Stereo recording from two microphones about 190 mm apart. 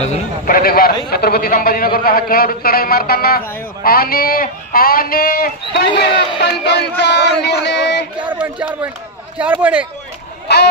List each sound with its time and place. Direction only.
0.0 s a man's voice: 35° left (ahead or behind)
0.6 s a man's voice: 50° left (ahead or behind)
8.3 s speech: 5° right (ahead or behind)
10.5 s speech: 65° left (ahead or behind)